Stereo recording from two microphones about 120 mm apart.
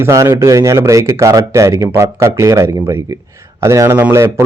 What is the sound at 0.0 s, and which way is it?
Speech, 25° right (ahead or behind).